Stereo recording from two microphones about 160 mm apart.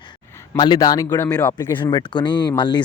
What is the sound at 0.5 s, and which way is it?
Speech, 25° left (ahead or behind).